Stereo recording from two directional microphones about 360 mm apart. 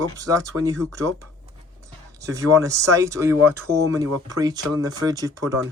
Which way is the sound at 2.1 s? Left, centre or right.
Centre.